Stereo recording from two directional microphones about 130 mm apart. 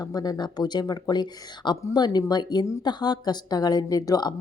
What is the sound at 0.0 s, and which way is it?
Speech, 30° left (ahead or behind).